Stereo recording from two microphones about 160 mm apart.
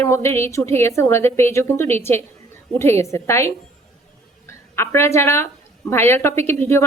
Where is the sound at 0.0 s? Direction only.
15° left (ahead or behind).